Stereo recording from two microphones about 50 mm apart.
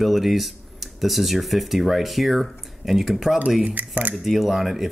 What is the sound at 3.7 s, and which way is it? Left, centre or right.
Speech, right.